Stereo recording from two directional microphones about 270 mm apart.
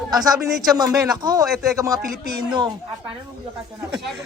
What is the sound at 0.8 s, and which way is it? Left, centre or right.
Speech, centre.